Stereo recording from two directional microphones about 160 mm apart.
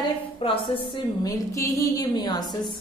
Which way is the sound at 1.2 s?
20° left (ahead or behind).